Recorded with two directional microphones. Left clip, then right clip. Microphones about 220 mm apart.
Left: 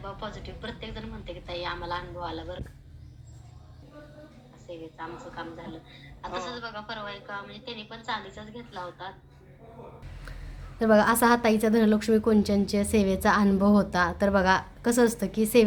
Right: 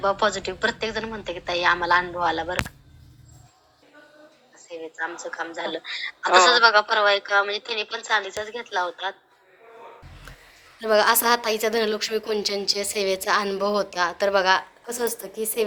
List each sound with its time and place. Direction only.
0.0 s a woman's voice: 50° right (ahead or behind)
5.5 s a woman's voice: 55° right (ahead or behind)
10.8 s a woman's voice: 5° right (ahead or behind)